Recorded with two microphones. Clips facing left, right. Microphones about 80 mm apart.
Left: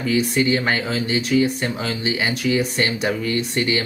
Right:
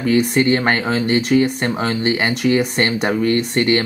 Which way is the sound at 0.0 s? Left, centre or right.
Right.